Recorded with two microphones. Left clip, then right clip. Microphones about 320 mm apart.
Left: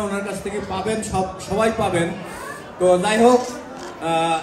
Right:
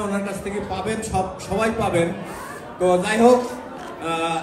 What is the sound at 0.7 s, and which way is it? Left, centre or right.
Speech, left.